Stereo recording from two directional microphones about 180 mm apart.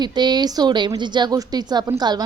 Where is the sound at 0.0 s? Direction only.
25° right (ahead or behind).